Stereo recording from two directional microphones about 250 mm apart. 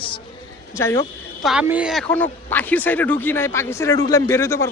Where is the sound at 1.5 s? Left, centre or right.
Centre.